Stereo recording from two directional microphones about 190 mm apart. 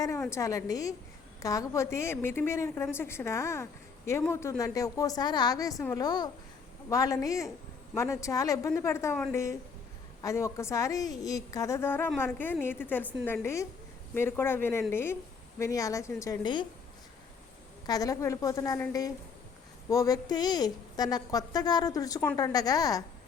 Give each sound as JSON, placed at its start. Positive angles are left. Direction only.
{"t": 0.0, "sound": "a woman's voice", "side_deg": 15}
{"t": 17.8, "sound": "a woman's voice", "side_deg": 20}